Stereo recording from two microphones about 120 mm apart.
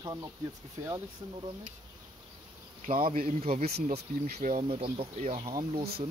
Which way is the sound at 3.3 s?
70° right (ahead or behind).